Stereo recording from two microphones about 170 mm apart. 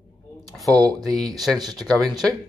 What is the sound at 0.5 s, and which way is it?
Speech, centre (ahead or behind).